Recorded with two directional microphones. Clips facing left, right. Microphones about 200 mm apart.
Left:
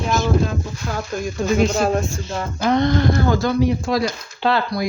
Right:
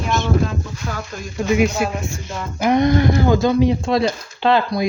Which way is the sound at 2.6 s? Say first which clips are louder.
Right 2 dB; 15° right (ahead or behind).